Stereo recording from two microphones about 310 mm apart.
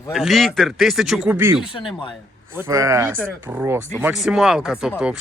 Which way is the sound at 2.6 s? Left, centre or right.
Centre.